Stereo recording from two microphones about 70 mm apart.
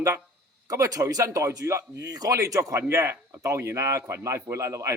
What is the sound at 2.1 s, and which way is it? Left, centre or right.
A man's voice, right.